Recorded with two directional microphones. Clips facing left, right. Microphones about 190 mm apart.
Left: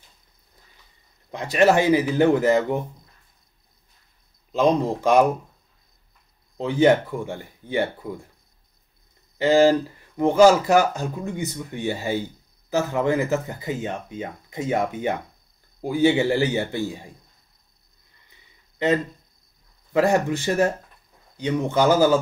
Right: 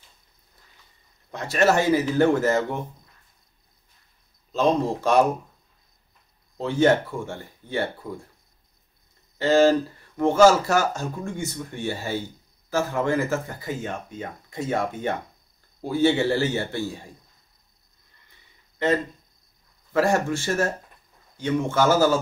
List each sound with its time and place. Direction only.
1.3 s speech: 15° left (ahead or behind)
4.5 s speech: 15° left (ahead or behind)
6.6 s speech: 15° left (ahead or behind)
9.4 s speech: 15° left (ahead or behind)
19.9 s speech: 15° left (ahead or behind)